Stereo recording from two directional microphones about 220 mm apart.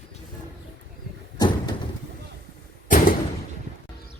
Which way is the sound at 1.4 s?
20° left (ahead or behind).